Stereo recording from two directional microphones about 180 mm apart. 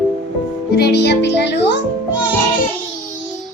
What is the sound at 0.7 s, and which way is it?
Music, 65° left (ahead or behind).